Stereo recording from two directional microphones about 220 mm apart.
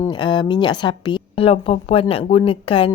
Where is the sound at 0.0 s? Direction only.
20° left (ahead or behind).